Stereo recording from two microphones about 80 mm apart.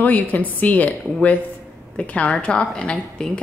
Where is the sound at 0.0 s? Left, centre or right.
Left.